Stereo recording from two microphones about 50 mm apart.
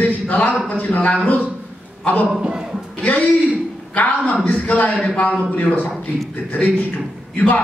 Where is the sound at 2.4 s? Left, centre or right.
Centre.